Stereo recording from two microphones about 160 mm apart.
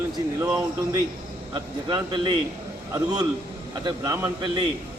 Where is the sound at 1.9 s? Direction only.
25° right (ahead or behind).